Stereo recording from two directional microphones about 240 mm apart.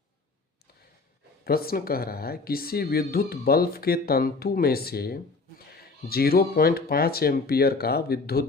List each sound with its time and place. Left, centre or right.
1.5 s speech: left